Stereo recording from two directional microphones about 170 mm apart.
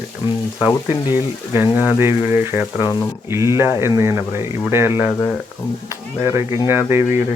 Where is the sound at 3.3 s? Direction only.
15° right (ahead or behind).